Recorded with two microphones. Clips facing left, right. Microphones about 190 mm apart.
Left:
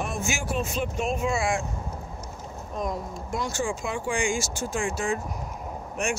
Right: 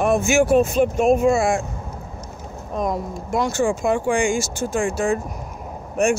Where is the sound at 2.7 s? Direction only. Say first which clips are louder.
Right 7 dB; 65° right (ahead or behind).